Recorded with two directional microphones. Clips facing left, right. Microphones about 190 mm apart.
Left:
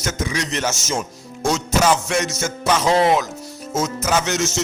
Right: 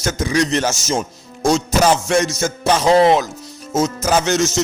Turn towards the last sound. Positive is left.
turn(degrees=-35)  # may be behind; listen again after turning